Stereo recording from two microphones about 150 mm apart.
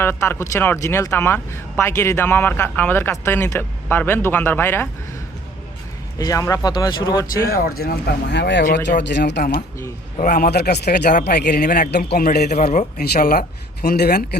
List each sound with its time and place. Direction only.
0.0 s speech: 15° left (ahead or behind)
6.1 s speech: 25° left (ahead or behind)
7.4 s speech: 80° left
8.6 s a man's voice: 65° left (ahead or behind); by 14.3 s 90° left